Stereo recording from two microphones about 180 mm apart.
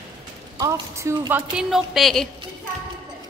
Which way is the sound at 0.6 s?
15° right (ahead or behind).